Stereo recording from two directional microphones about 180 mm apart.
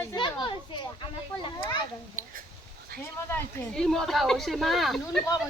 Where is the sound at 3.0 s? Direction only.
15° left (ahead or behind).